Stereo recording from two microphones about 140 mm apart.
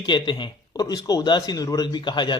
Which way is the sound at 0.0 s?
35° left (ahead or behind).